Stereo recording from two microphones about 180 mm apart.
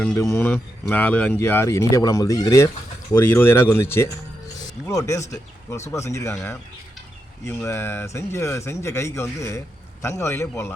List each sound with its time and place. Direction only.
0.3 s speech: 10° left (ahead or behind)
7.4 s speech: 15° left (ahead or behind)